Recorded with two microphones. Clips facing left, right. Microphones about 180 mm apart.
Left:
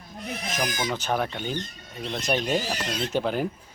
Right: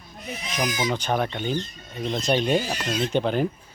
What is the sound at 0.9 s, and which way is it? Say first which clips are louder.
Speech: right 2 dB; 5° left (ahead or behind).